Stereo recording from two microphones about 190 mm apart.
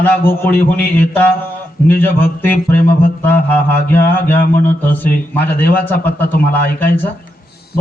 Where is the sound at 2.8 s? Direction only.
55° left (ahead or behind).